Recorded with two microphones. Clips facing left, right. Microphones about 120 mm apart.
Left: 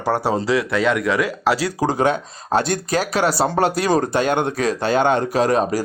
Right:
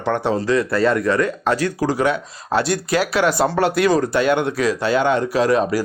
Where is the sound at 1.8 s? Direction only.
20° left (ahead or behind).